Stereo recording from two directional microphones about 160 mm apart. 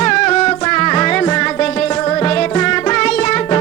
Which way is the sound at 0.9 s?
10° left (ahead or behind).